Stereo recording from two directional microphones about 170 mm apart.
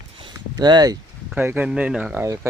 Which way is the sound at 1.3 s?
10° right (ahead or behind).